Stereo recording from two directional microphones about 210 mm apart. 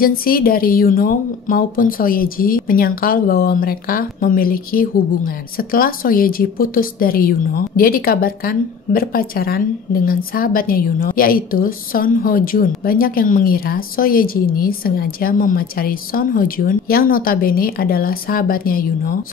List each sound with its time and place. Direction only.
0.0 s a woman's voice: 45° left (ahead or behind)